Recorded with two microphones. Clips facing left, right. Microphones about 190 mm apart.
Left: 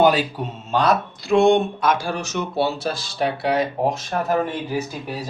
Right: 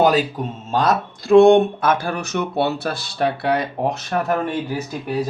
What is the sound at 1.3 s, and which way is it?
Speech, 60° right (ahead or behind).